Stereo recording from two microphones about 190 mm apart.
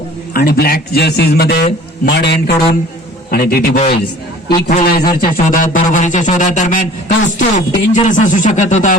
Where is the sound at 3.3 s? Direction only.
55° left (ahead or behind).